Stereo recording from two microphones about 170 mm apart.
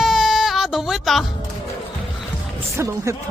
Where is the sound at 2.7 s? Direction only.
15° right (ahead or behind).